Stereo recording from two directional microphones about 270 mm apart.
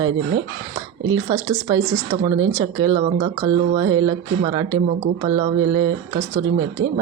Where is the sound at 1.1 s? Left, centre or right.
Centre.